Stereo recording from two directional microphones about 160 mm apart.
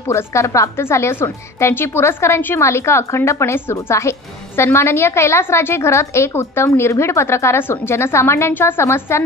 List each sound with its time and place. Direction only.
0.1 s a woman's voice: 20° left (ahead or behind)